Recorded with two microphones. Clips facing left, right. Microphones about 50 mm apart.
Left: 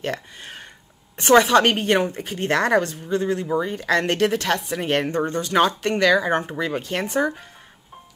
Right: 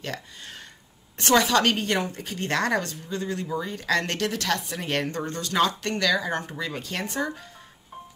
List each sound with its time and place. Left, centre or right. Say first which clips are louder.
0.0 s a woman's voice: left 6 dB; left